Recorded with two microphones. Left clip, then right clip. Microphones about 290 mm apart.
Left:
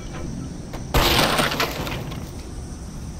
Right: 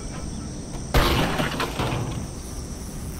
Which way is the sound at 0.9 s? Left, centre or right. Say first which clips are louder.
Left 2 dB; centre.